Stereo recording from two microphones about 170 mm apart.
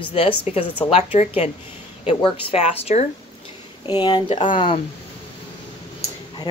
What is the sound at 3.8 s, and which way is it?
Speech, 25° left (ahead or behind).